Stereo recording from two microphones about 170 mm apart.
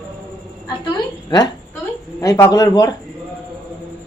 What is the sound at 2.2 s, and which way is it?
Speech, 20° left (ahead or behind).